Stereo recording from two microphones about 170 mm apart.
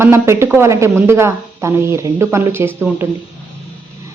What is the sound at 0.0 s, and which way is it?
Speech, 15° right (ahead or behind).